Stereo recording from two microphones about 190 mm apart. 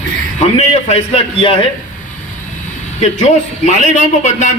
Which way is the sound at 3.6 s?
40° left (ahead or behind).